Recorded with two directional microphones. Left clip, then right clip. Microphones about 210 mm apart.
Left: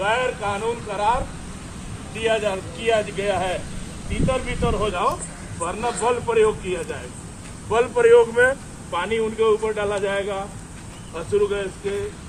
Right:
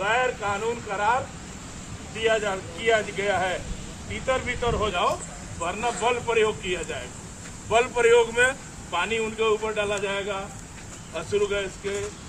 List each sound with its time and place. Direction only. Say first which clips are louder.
0.0 s speech: left 2 dB; 25° left (ahead or behind)
2.1 s speech: left 2 dB; 15° left (ahead or behind)
5.6 s a man's voice: left 3 dB; 10° right (ahead or behind); by 10.4 s 40° right (ahead or behind)
11.1 s a man's voice: left 4 dB; 15° right (ahead or behind)